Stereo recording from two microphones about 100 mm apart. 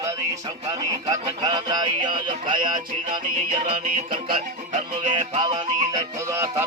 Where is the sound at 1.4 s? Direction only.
45° right (ahead or behind).